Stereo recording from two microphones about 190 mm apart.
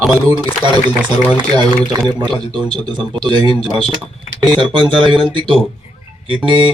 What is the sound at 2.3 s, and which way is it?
Speech, 25° right (ahead or behind).